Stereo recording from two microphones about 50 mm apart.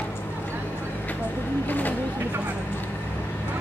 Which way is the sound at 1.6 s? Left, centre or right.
Left.